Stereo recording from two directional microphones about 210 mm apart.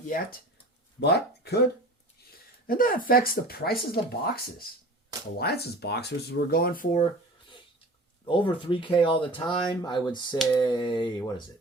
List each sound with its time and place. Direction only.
0.9 s speech: 50° left (ahead or behind)
2.6 s speech: 40° left (ahead or behind)
5.4 s speech: 50° left (ahead or behind)
8.2 s speech: 25° left (ahead or behind)